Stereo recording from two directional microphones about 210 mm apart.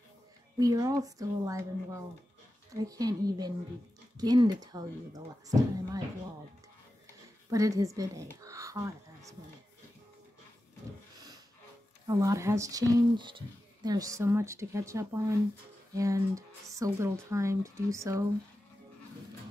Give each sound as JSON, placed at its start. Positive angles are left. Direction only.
{"t": 0.6, "sound": "speech", "side_deg": -15}
{"t": 2.7, "sound": "speech", "side_deg": -15}
{"t": 7.4, "sound": "speech", "side_deg": -15}
{"t": 12.1, "sound": "speech", "side_deg": -15}